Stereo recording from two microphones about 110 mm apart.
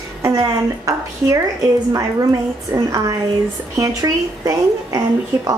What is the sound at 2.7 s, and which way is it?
A woman's voice, 30° right (ahead or behind).